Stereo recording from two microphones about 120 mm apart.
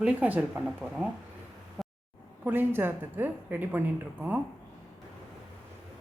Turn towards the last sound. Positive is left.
turn(degrees=-15)  # may be behind; listen again after turning